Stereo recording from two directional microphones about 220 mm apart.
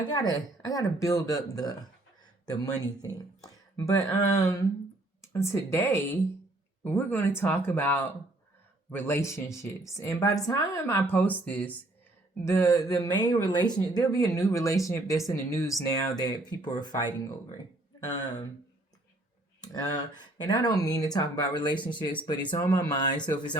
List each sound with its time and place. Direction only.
0.1 s speech: 20° left (ahead or behind)
18.0 s speech: 15° left (ahead or behind)
19.6 s speech: 20° left (ahead or behind)